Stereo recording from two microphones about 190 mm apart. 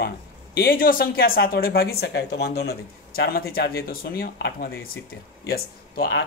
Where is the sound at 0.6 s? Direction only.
50° left (ahead or behind).